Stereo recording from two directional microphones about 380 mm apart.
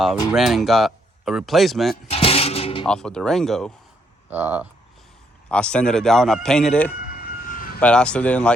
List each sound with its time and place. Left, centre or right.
0.3 s speech: centre
2.0 s music: centre
2.8 s speech: centre
7.4 s a sound: left
7.8 s speech: centre